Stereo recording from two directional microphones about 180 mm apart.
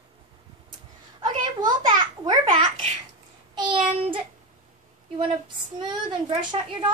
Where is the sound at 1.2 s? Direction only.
25° right (ahead or behind).